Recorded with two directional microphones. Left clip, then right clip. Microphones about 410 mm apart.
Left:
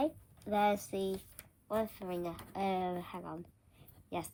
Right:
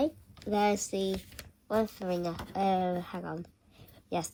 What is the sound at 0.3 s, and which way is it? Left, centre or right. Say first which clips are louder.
A woman's voice: right 3 dB; centre.